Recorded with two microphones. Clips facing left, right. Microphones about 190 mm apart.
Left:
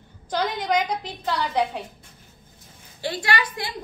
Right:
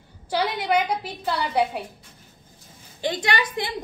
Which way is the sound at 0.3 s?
10° right (ahead or behind).